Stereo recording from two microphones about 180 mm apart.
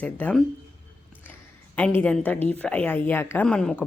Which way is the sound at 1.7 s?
10° left (ahead or behind).